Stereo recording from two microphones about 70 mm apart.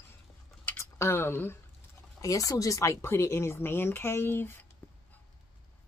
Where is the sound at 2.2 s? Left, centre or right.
Left.